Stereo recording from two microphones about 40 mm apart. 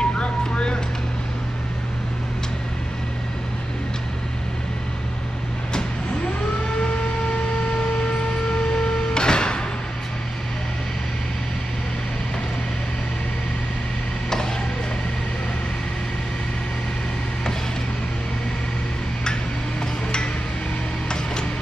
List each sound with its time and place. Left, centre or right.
0.0 s vehicle: left
8.5 s printer: centre